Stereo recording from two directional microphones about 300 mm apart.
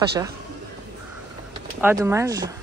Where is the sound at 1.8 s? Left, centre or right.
Centre.